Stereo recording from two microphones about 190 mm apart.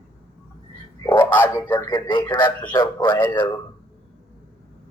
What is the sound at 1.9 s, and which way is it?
Speech, 25° left (ahead or behind).